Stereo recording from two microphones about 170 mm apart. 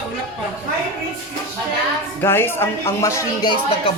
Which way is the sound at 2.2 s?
15° left (ahead or behind).